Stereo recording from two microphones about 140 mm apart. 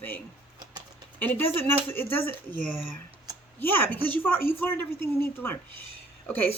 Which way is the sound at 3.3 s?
25° right (ahead or behind).